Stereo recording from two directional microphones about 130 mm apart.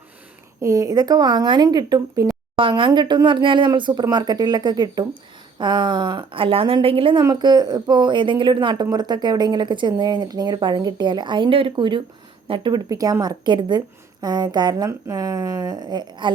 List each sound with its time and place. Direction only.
0.6 s a woman's voice: 25° right (ahead or behind)
2.6 s a woman's voice: 40° right (ahead or behind)